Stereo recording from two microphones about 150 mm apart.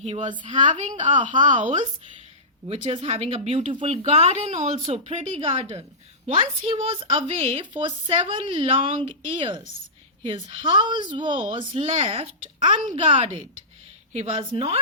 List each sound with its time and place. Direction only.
0.0 s a woman's voice: 50° right (ahead or behind)
2.6 s a woman's voice: 35° right (ahead or behind)
14.1 s a woman's voice: 45° right (ahead or behind)